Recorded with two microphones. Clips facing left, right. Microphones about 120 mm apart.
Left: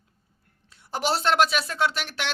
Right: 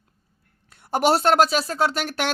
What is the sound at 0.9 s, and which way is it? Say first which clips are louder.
Speech: right 6 dB; 50° right (ahead or behind).